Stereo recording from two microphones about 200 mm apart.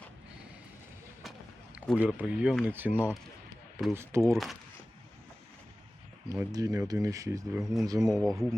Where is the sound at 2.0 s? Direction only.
5° right (ahead or behind).